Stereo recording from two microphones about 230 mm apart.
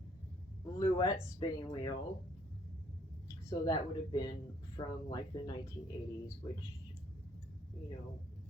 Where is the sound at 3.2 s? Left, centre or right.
Centre.